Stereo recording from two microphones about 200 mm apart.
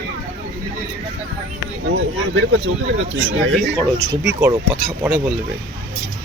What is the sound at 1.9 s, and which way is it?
Speech, 75° right (ahead or behind).